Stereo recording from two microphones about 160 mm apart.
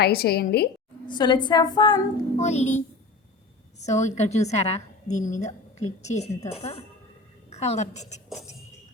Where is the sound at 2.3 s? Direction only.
45° left (ahead or behind).